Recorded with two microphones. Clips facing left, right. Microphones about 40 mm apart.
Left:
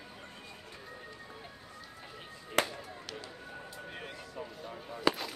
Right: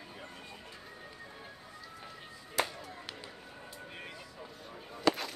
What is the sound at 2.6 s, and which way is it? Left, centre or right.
Music, left.